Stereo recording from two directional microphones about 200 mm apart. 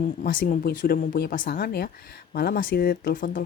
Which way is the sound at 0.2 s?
40° left (ahead or behind).